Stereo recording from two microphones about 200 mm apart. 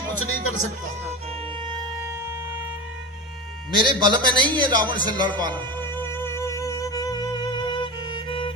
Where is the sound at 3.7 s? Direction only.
25° right (ahead or behind).